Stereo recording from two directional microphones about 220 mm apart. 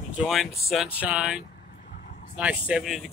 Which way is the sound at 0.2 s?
5° right (ahead or behind).